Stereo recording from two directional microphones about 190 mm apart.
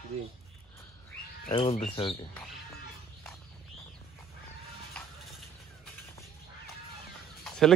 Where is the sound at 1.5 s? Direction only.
30° left (ahead or behind).